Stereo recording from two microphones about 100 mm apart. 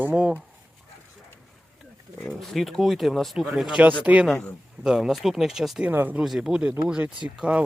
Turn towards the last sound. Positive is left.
turn(degrees=-5)  # may be behind; listen again after turning